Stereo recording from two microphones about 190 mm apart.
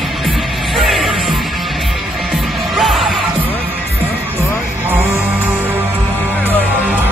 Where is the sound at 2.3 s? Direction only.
Centre (ahead or behind).